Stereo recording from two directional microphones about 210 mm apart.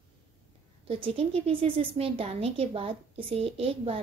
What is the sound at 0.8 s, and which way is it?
A woman's voice, 25° right (ahead or behind).